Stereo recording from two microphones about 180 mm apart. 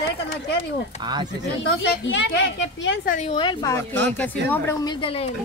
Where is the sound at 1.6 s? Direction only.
75° left (ahead or behind).